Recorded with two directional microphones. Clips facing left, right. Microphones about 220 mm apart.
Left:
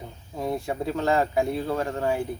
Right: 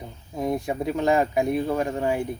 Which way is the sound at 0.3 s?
15° right (ahead or behind).